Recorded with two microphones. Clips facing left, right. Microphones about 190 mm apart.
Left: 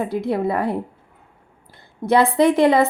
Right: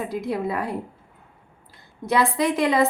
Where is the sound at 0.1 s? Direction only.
60° left (ahead or behind).